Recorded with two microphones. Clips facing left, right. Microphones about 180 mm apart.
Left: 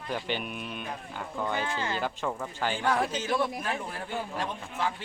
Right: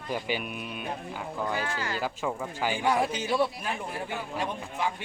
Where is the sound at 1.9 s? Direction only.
5° right (ahead or behind).